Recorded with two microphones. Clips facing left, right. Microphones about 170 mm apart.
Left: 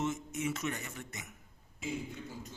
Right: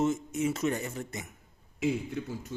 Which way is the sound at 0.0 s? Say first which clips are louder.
Right 7 dB; 35° right (ahead or behind).